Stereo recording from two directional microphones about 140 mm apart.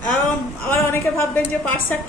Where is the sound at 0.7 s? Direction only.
15° left (ahead or behind).